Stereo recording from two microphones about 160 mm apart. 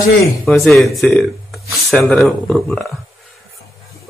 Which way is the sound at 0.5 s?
Centre (ahead or behind).